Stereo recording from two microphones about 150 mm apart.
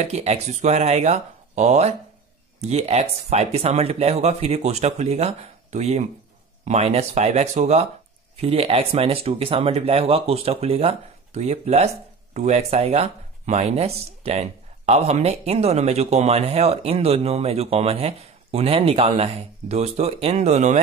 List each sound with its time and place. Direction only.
0.0 s speech: 45° right (ahead or behind)